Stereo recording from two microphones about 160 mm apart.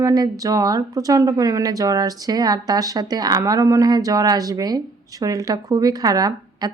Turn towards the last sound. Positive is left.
turn(degrees=-25)  # may be behind; listen again after turning